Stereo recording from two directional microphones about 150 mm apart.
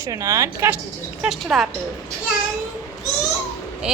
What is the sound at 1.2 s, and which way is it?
Speech, centre (ahead or behind).